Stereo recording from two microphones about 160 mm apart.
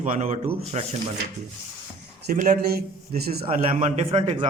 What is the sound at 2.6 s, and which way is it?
Speech, 80° right.